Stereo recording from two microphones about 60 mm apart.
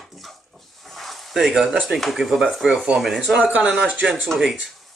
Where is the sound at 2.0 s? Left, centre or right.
Centre.